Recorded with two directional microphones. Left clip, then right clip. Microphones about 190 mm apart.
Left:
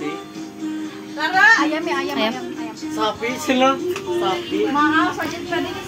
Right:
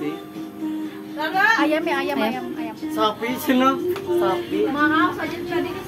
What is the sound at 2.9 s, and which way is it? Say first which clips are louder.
Speech: even; 35° right (ahead or behind).